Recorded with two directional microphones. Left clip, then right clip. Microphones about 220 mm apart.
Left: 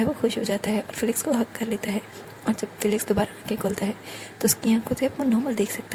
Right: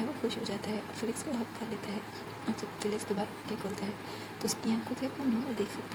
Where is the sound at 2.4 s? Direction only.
40° left (ahead or behind).